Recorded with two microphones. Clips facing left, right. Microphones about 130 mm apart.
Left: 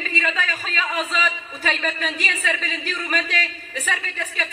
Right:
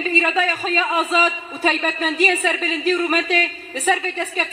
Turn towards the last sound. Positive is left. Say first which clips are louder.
# right 5 dB
turn(degrees=-35)  # may be behind; listen again after turning